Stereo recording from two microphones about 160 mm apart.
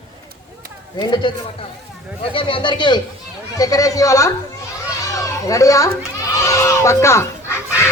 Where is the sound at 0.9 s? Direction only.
30° left (ahead or behind).